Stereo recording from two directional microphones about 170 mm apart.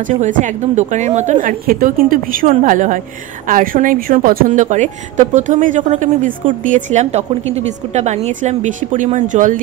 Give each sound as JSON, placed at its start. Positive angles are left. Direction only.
{"t": 0.1, "sound": "a woman's voice", "side_deg": -50}